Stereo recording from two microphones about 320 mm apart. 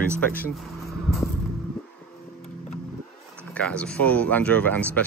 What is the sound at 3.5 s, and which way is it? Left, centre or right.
Speech, centre.